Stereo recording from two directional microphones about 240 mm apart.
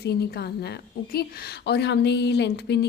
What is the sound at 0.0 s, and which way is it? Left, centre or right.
A woman's voice, left.